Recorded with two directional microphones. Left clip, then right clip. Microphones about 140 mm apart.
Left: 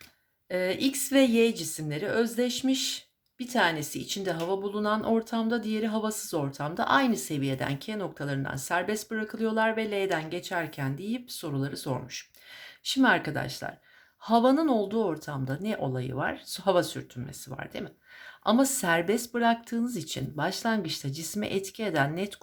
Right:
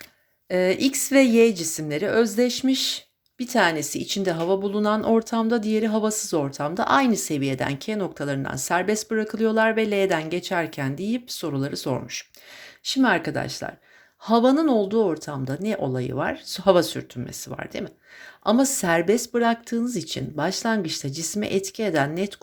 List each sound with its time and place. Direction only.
0.4 s speech: 40° right (ahead or behind)
12.8 s speech: 20° right (ahead or behind)
18.4 s speech: 20° right (ahead or behind)